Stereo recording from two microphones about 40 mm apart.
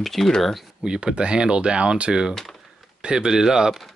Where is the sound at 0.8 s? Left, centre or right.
Right.